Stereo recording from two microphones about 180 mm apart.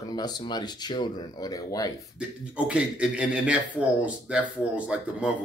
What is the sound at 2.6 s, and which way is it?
Speech, 5° right (ahead or behind).